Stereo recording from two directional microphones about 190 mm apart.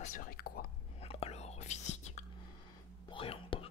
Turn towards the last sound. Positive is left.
turn(degrees=30)  # may be behind; listen again after turning